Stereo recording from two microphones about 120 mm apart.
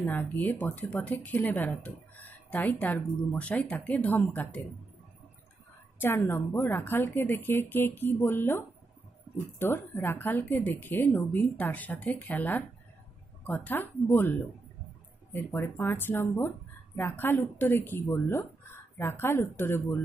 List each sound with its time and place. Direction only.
0.0 s a woman's voice: 15° left (ahead or behind)
5.9 s a woman's voice: 20° left (ahead or behind)
15.3 s speech: 20° left (ahead or behind)